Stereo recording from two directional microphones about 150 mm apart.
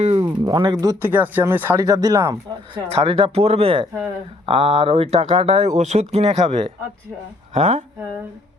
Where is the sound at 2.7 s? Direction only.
40° right (ahead or behind).